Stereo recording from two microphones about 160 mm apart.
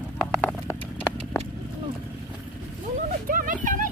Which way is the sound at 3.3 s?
60° right (ahead or behind).